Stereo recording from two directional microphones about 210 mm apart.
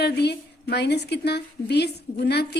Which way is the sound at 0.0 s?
50° left (ahead or behind).